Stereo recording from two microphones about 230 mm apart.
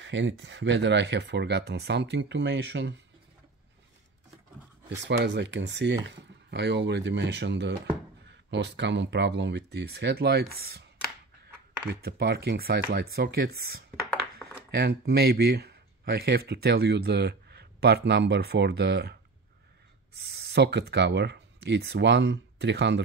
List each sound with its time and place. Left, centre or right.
0.0 s speech: right
5.0 s speech: right
12.0 s speech: right
20.2 s speech: right